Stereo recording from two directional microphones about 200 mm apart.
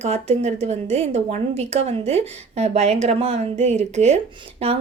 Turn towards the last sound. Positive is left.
turn(degrees=-30)  # may be behind; listen again after turning